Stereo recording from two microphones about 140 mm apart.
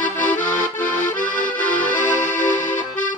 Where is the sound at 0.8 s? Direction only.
70° left (ahead or behind).